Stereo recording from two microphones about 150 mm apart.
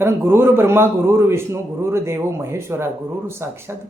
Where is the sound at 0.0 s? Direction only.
15° right (ahead or behind).